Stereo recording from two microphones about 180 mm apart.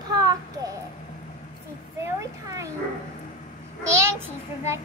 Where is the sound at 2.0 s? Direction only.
20° right (ahead or behind).